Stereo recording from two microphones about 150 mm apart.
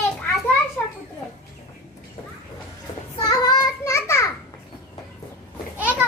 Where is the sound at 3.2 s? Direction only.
30° left (ahead or behind).